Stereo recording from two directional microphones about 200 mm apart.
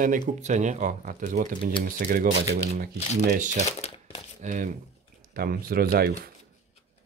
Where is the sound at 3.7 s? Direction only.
30° left (ahead or behind).